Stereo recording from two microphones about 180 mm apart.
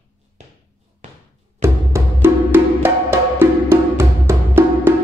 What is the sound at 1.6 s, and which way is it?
Music, 15° right (ahead or behind).